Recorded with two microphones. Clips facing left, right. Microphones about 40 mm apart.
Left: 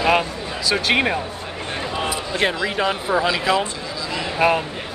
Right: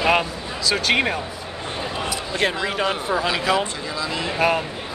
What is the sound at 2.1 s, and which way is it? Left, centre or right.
Basketball bounce, centre.